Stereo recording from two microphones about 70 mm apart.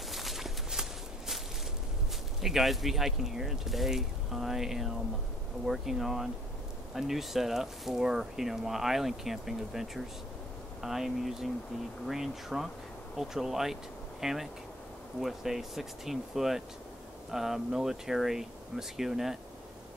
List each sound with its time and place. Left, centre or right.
0.1 s walk: centre
2.4 s speech: centre